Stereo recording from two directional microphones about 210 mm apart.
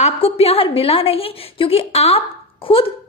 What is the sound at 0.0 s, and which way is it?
A woman's voice, 30° left (ahead or behind).